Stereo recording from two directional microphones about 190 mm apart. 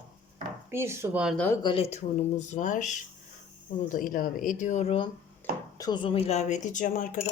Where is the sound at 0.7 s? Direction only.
15° right (ahead or behind).